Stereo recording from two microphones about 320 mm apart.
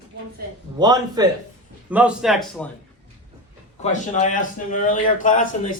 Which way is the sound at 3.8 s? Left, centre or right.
Left.